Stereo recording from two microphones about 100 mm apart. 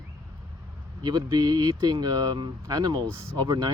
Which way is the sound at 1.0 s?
40° right (ahead or behind).